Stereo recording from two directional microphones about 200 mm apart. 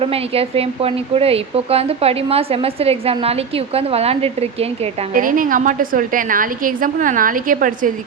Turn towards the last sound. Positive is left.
turn(degrees=-40)  # may be behind; listen again after turning